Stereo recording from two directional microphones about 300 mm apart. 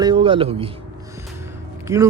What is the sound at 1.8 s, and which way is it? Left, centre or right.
Speech, centre.